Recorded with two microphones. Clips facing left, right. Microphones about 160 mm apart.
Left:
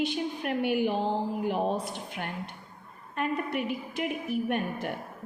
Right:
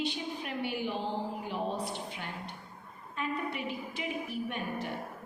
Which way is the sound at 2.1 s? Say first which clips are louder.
Left 5 dB; 60° left (ahead or behind).